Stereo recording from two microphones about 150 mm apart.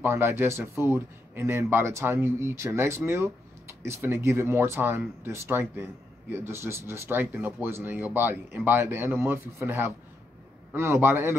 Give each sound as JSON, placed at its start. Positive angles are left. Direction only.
{"t": 0.0, "sound": "speech", "side_deg": -15}